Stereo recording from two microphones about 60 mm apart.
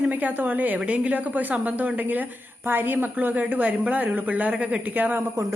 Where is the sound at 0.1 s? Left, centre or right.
Right.